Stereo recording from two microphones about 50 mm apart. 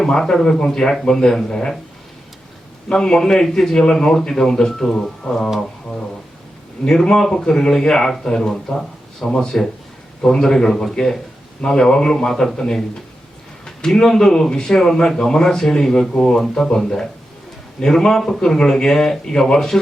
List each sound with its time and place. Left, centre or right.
0.0 s a man's voice: centre
2.9 s a man's voice: centre
5.5 s a sound: centre
6.8 s a man's voice: centre
13.7 s a man's voice: centre